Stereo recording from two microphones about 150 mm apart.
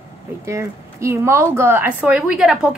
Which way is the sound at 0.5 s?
20° right (ahead or behind).